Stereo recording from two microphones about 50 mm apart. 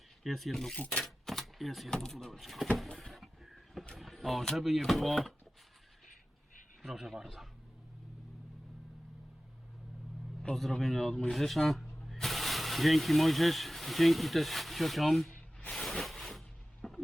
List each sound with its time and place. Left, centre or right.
0.2 s speech: centre
1.0 s a sound: centre
1.9 s speech: centre
2.9 s printer: centre
3.9 s speech: centre
6.8 s speech: centre
10.5 s speech: centre
15.7 s a sound: centre
16.8 s a sound: centre